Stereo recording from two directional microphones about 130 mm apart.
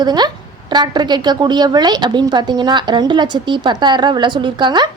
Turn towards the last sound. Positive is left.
turn(degrees=-35)  # may be behind; listen again after turning